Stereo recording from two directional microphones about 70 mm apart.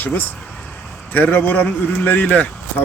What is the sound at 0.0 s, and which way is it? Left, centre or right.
Speech, left.